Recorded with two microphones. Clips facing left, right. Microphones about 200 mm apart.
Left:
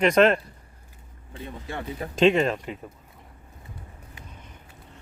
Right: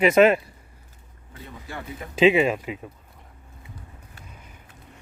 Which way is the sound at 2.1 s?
5° right (ahead or behind).